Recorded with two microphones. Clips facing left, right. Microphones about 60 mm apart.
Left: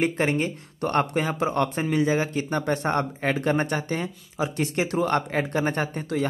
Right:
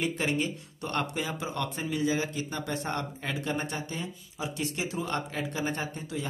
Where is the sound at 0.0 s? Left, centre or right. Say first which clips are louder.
Left 6 dB; left.